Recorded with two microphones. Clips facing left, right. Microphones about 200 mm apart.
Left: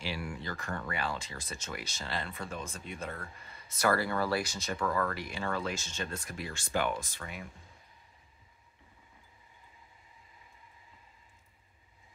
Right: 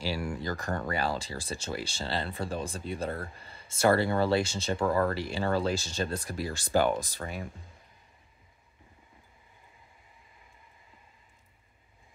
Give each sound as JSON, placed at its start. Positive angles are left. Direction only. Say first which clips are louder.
{"t": 0.0, "sound": "speech", "louder": "right 6 dB", "side_deg": -40}